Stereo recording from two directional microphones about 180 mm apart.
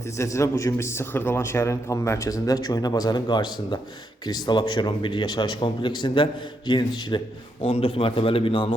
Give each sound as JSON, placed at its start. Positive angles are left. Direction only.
{"t": 0.2, "sound": "a man's voice", "side_deg": 15}